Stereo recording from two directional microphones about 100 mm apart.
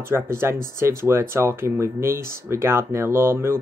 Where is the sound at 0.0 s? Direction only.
25° right (ahead or behind).